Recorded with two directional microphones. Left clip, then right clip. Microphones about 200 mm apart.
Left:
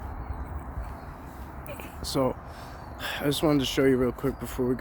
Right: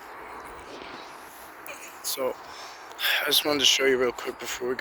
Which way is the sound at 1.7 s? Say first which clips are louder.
Right 1 dB; 25° left (ahead or behind).